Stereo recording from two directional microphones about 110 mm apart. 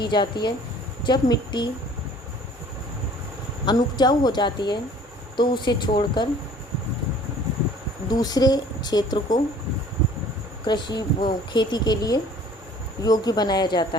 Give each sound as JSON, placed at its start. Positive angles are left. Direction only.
{"t": 0.0, "sound": "a woman's voice", "side_deg": 45}
{"t": 3.7, "sound": "a woman's voice", "side_deg": 40}
{"t": 8.1, "sound": "speech", "side_deg": 35}
{"t": 10.7, "sound": "a woman's voice", "side_deg": 45}